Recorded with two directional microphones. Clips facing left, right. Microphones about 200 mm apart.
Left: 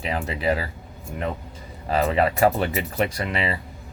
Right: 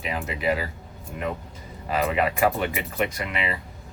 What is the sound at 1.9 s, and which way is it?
Speech, 30° left (ahead or behind).